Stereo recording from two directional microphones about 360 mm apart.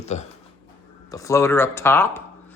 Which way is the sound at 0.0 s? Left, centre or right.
Centre.